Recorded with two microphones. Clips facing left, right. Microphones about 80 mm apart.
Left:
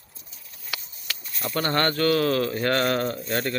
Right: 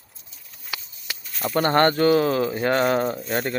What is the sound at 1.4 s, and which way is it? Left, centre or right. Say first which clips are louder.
Speech: right 6 dB; right.